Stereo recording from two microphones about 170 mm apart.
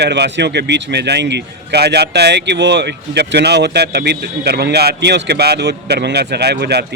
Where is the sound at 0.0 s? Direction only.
85° right.